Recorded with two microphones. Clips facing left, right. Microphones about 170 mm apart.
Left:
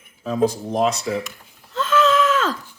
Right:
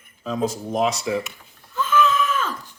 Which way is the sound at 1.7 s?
80° left.